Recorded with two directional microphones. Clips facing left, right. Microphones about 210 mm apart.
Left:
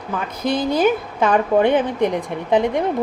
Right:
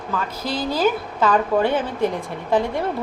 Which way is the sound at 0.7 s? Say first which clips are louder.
Left 1 dB; 15° left (ahead or behind).